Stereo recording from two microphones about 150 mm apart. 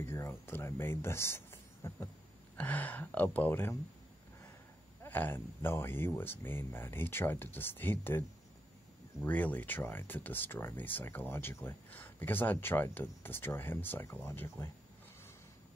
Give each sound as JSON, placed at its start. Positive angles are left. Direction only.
{"t": 0.0, "sound": "speech", "side_deg": 15}
{"t": 5.0, "sound": "speech", "side_deg": 15}
{"t": 9.2, "sound": "speech", "side_deg": 10}